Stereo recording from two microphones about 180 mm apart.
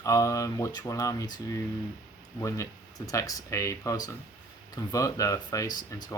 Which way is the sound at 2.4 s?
20° left (ahead or behind).